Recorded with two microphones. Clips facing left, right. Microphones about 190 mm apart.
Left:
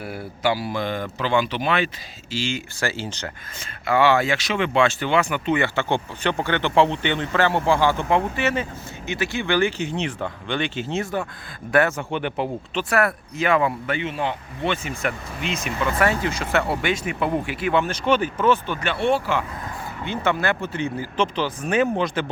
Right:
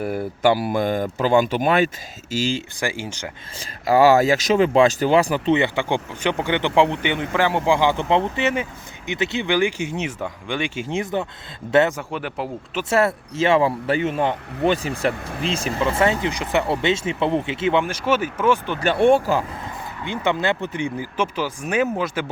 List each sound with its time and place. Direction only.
0.0 s speech: 45° right (ahead or behind)
2.8 s speech: 10° right (ahead or behind)
3.6 s speech: 35° right (ahead or behind)
5.5 s speech: 15° right (ahead or behind)
11.9 s speech: centre (ahead or behind)
12.9 s speech: 25° right (ahead or behind)
17.8 s speech: 10° right (ahead or behind)
18.9 s speech: 50° right (ahead or behind)
19.6 s speech: 20° right (ahead or behind)